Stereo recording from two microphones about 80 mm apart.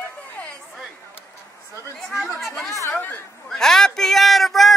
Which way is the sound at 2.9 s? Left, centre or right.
Left.